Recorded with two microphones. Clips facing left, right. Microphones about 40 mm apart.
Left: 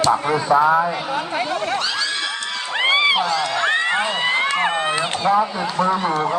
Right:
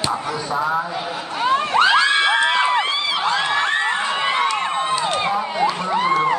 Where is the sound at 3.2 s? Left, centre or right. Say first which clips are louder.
Right 1 dB; right.